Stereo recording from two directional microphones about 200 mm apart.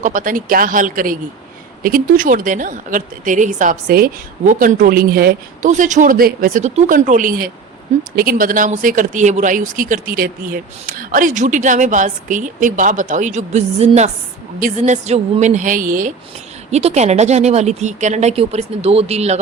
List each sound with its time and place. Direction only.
0.0 s speech: 40° right (ahead or behind)